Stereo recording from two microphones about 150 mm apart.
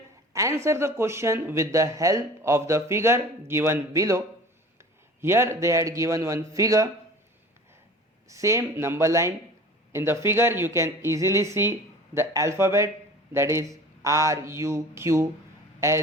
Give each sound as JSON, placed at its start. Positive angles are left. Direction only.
{"t": 0.3, "sound": "speech", "side_deg": -20}
{"t": 5.2, "sound": "speech", "side_deg": -15}
{"t": 8.3, "sound": "speech", "side_deg": -20}